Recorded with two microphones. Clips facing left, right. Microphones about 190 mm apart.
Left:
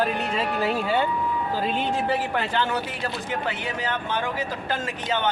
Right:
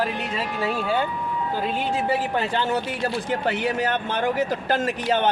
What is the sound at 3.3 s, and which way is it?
Speech, 40° right (ahead or behind).